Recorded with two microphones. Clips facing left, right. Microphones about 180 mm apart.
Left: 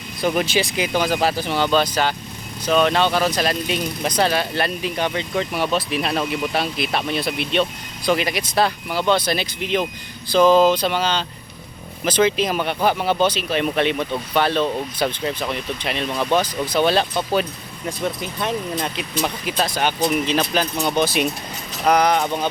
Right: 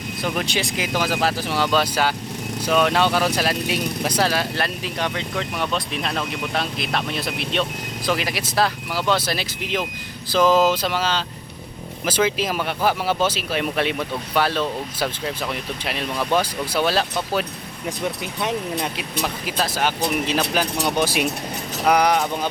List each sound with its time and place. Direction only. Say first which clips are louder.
0.2 s speech: left 5 dB; 5° left (ahead or behind)
18.3 s speech: right 1 dB; 15° right (ahead or behind)
19.2 s speech: left 2 dB; centre (ahead or behind)